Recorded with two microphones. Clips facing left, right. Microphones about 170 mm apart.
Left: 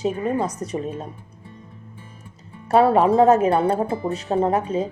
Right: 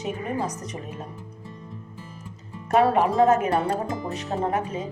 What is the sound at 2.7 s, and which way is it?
Speech, 30° left (ahead or behind).